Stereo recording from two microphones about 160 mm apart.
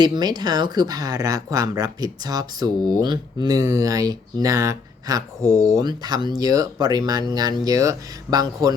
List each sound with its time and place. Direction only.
0.0 s speech: 25° right (ahead or behind)